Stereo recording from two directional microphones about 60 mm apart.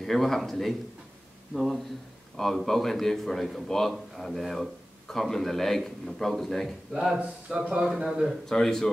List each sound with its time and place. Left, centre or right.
0.0 s speech: centre
7.4 s speech: centre
7.8 s a man's voice: centre
8.5 s a man's voice: centre